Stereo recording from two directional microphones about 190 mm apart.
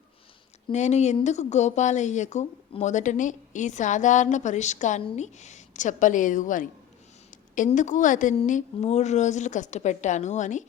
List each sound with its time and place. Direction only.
0.7 s a woman's voice: 35° left (ahead or behind)